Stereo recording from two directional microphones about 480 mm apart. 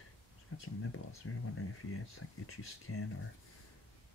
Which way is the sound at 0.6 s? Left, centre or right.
Left.